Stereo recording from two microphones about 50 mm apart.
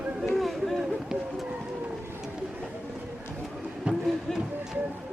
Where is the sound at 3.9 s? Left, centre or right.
Right.